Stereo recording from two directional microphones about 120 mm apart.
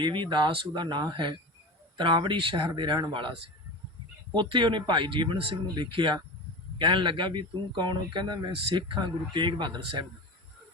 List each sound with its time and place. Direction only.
0.0 s speech: 40° right (ahead or behind)